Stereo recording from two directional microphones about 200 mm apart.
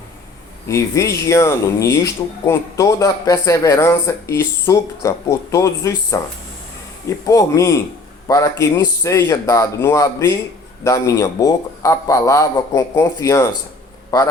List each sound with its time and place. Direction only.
0.7 s speech: 15° left (ahead or behind)
7.3 s speech: 15° left (ahead or behind)